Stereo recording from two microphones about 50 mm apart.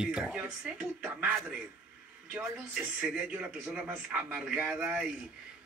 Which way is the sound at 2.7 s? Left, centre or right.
Right.